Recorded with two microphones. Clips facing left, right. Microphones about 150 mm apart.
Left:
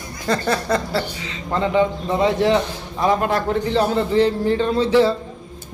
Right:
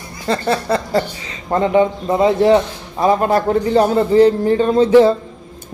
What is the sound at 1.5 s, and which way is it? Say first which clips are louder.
A man's voice: right 4 dB; 40° right (ahead or behind).